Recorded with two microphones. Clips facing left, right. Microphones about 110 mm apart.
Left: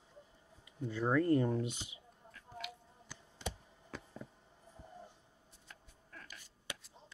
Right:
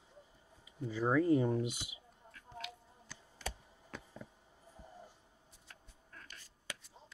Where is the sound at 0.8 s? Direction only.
5° right (ahead or behind).